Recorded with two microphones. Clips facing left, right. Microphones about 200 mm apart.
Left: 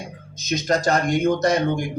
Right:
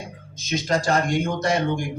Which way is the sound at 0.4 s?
40° left (ahead or behind).